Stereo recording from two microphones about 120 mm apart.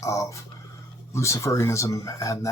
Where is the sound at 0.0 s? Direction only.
25° left (ahead or behind).